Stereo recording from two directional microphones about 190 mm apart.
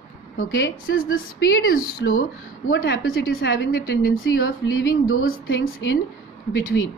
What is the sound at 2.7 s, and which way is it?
A woman's voice, 60° left (ahead or behind).